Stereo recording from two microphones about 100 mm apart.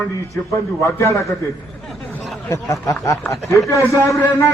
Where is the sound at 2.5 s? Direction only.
35° left (ahead or behind).